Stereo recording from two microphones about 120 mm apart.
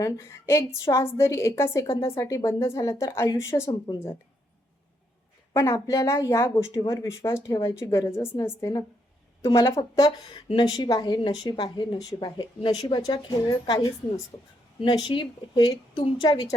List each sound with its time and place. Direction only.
0.0 s speech: 25° left (ahead or behind)
5.5 s speech: 25° left (ahead or behind)
10.2 s a woman's voice: 40° left (ahead or behind)